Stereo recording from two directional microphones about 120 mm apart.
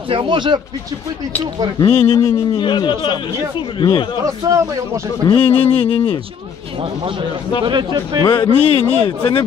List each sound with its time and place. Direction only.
0.1 s speech: 45° right (ahead or behind)
1.9 s a man's voice: 50° left (ahead or behind)
2.5 s speech: 40° left (ahead or behind)
4.4 s a man's voice: 30° right (ahead or behind)
5.2 s a man's voice: 50° left (ahead or behind)
7.6 s speech: 35° right (ahead or behind)
8.2 s a man's voice: 40° left (ahead or behind)